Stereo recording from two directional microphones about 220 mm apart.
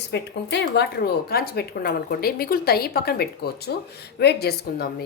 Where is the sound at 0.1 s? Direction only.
50° left (ahead or behind).